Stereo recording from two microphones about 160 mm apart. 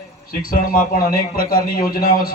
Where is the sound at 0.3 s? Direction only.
60° left (ahead or behind).